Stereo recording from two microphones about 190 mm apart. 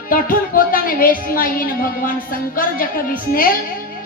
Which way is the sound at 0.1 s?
50° left (ahead or behind).